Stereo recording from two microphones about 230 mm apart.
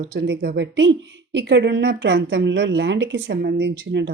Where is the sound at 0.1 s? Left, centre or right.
Right.